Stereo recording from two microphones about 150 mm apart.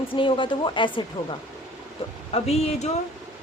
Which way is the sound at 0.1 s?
35° left (ahead or behind).